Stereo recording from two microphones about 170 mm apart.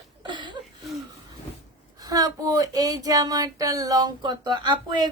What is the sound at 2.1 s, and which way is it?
Speech, 20° right (ahead or behind).